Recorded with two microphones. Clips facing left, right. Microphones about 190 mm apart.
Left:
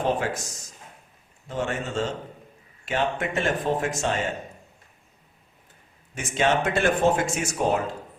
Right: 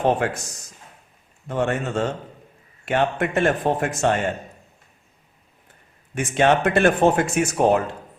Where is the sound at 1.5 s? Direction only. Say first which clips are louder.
Right 5 dB; 60° right (ahead or behind).